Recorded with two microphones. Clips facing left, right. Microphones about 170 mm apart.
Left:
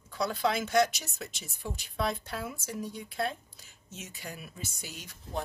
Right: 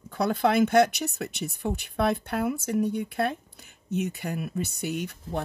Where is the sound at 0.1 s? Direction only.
55° right (ahead or behind).